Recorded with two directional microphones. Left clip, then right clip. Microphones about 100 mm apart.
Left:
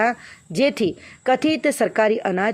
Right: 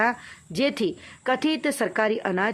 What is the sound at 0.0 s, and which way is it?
A woman's voice, 30° left (ahead or behind).